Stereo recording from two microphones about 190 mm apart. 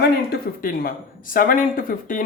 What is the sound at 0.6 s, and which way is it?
Speech, 50° left (ahead or behind).